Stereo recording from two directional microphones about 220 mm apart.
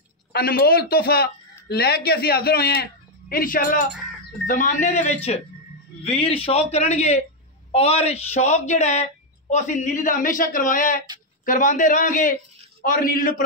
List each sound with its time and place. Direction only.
0.3 s a woman's voice: 45° left (ahead or behind)